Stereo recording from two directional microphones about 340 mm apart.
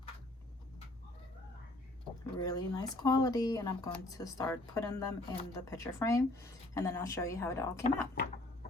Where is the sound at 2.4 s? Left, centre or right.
Centre.